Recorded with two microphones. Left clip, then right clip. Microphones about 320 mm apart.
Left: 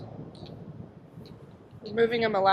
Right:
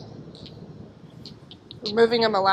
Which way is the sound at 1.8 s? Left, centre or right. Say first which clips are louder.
Right 6 dB; centre.